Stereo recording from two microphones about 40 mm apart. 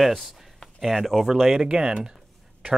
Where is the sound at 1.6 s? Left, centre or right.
Right.